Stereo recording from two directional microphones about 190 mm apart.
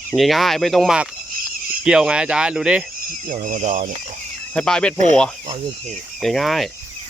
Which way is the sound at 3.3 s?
40° right (ahead or behind).